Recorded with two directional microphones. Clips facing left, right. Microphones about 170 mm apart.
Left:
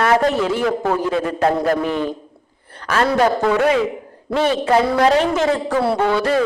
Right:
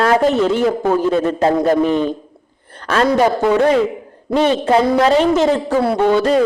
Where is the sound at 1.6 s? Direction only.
25° right (ahead or behind).